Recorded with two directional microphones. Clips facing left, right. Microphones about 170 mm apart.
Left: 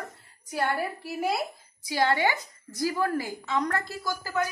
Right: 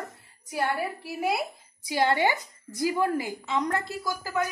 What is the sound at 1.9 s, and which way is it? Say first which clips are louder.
A woman's voice: right 1 dB; 20° right (ahead or behind).